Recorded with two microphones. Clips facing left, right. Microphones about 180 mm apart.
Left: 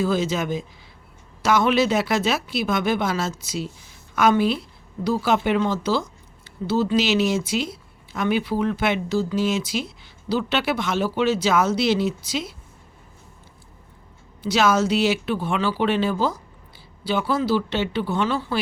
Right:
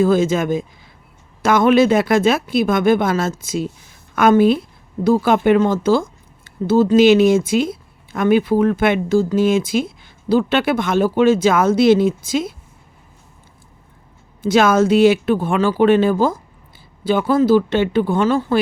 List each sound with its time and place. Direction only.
0.0 s speech: 50° right (ahead or behind)
14.4 s speech: 50° right (ahead or behind)